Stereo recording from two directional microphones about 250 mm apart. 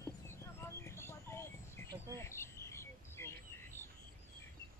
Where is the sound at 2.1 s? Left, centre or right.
Centre.